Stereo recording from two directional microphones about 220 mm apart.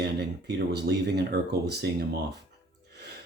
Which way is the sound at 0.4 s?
50° right (ahead or behind).